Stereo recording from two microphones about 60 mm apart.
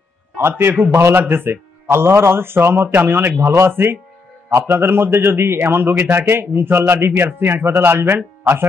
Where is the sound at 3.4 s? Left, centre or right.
Right.